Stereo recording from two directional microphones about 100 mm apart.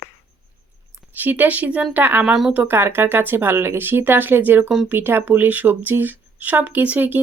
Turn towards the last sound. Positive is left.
turn(degrees=-20)  # may be behind; listen again after turning